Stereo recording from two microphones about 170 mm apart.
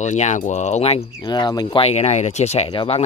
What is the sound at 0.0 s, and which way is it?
Speech, 45° left (ahead or behind).